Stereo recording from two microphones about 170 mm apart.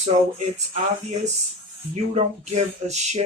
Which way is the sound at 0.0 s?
40° right (ahead or behind).